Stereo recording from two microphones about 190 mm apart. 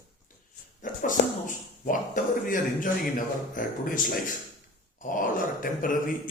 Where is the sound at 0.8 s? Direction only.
45° left (ahead or behind).